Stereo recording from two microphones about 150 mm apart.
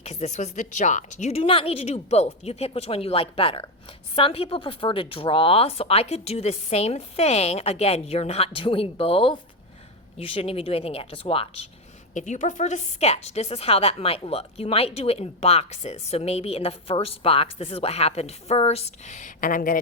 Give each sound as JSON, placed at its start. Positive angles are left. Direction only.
{"t": 0.0, "sound": "a woman's voice", "side_deg": 45}
{"t": 12.1, "sound": "a woman's voice", "side_deg": 55}